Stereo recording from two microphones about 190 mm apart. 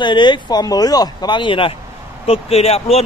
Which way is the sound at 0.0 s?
25° left (ahead or behind).